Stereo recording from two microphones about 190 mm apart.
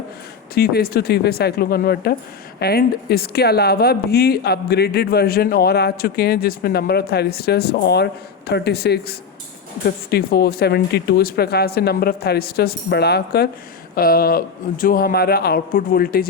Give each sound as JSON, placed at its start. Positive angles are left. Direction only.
{"t": 0.5, "sound": "speech", "side_deg": 55}